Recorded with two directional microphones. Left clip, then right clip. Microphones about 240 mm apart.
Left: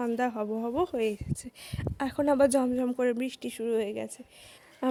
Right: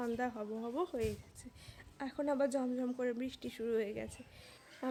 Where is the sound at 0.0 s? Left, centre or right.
Left.